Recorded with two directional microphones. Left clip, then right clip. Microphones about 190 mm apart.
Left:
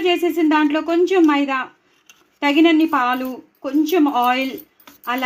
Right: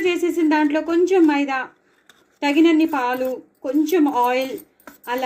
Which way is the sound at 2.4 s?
25° left (ahead or behind).